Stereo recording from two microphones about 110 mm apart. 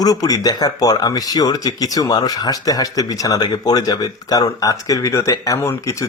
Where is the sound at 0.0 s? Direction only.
35° left (ahead or behind).